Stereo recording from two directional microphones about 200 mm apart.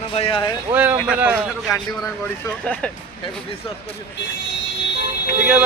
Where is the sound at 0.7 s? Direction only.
10° right (ahead or behind).